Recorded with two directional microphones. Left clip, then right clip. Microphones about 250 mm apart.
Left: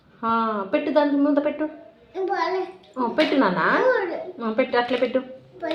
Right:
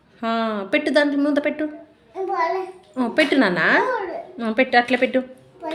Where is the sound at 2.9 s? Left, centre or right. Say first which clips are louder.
Right 2 dB; right.